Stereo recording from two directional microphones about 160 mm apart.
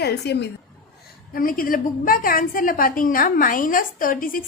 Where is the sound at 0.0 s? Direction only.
90° left.